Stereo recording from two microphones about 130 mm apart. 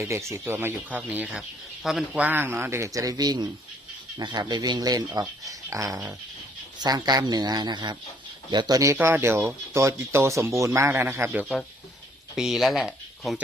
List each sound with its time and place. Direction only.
0.0 s speech: 20° right (ahead or behind)
1.4 s speech: centre (ahead or behind)
2.2 s speech: 15° right (ahead or behind)
12.4 s speech: centre (ahead or behind)